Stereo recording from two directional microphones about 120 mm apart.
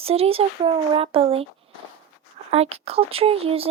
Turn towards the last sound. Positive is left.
turn(degrees=-55)  # may be behind; listen again after turning